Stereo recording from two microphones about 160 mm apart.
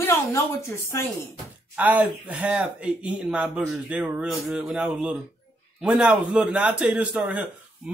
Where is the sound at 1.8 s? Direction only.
10° right (ahead or behind).